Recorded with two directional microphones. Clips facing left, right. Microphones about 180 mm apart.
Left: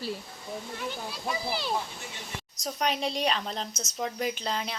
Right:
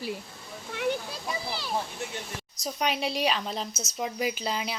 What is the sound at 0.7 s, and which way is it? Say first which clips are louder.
Speech: right 10 dB; 70° right (ahead or behind).